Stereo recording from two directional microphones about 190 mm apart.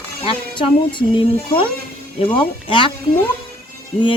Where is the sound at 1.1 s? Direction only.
25° left (ahead or behind).